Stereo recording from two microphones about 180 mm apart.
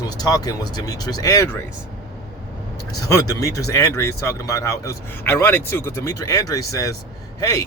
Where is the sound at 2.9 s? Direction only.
20° left (ahead or behind).